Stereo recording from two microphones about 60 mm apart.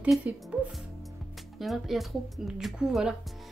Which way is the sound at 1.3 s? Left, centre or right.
Centre.